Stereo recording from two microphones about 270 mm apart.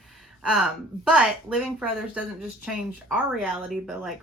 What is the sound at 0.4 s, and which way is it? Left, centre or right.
Speech, centre.